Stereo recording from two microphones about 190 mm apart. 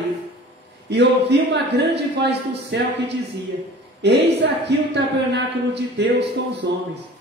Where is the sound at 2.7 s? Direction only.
60° right (ahead or behind).